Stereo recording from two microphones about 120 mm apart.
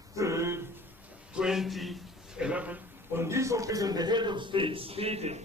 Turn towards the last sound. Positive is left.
turn(degrees=-60)  # may be behind; listen again after turning